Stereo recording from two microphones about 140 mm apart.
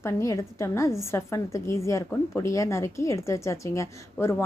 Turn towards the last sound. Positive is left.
turn(degrees=20)  # may be behind; listen again after turning